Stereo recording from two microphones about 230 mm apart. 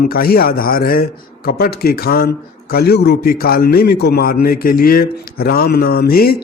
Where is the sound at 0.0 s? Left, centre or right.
Left.